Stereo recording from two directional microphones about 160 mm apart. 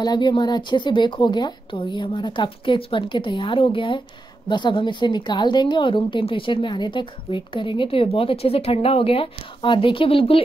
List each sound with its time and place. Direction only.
0.0 s a woman's voice: 25° left (ahead or behind)